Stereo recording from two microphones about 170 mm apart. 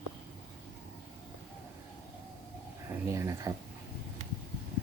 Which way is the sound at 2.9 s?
15° right (ahead or behind).